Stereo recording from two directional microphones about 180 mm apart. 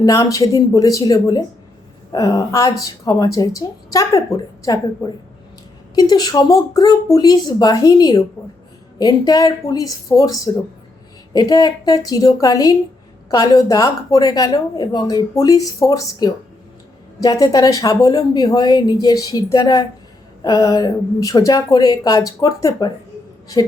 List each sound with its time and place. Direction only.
0.0 s speech: 20° left (ahead or behind)